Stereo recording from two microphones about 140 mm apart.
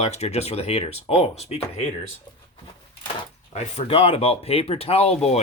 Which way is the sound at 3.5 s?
45° left (ahead or behind).